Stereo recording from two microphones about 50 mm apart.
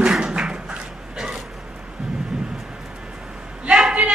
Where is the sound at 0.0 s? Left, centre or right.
Centre.